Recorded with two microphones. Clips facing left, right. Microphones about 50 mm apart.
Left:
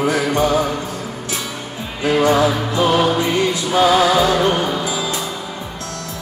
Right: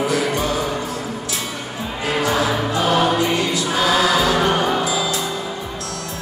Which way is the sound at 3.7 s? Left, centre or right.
Left.